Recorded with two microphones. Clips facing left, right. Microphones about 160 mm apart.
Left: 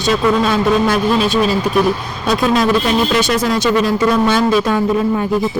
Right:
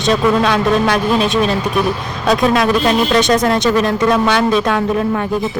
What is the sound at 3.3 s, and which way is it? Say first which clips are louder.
Speech: right 2 dB; 50° right (ahead or behind).